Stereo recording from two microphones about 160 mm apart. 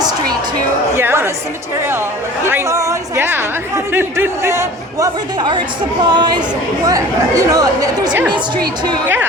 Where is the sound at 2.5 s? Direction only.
15° right (ahead or behind).